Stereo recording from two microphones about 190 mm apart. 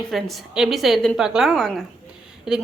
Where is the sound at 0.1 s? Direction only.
Centre (ahead or behind).